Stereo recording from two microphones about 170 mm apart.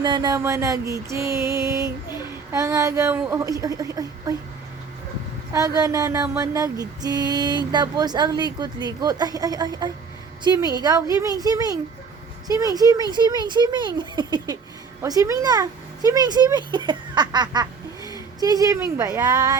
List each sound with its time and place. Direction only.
0.0 s a woman's voice: 25° right (ahead or behind)
5.5 s mantra: 20° right (ahead or behind)